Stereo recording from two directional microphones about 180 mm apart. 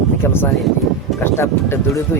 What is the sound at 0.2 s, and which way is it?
A man's voice, 10° left (ahead or behind).